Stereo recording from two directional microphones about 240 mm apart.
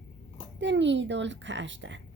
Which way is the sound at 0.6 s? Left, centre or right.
Right.